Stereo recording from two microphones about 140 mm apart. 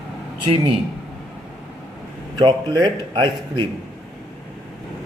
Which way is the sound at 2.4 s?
30° right (ahead or behind).